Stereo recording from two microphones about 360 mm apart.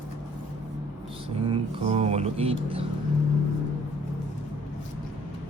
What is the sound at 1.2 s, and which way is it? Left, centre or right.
Speech, centre.